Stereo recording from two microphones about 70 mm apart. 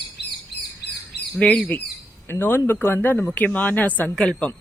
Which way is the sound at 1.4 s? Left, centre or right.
Left.